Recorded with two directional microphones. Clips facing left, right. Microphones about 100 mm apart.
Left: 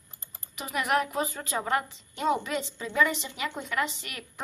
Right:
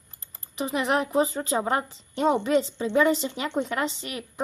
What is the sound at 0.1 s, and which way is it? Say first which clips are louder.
Typing: left 1 dB; 20° left (ahead or behind).